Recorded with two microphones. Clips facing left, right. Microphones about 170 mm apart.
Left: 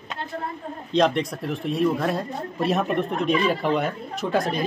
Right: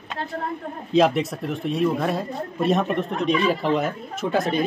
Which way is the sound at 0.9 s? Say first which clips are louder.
Right 2 dB; 5° right (ahead or behind).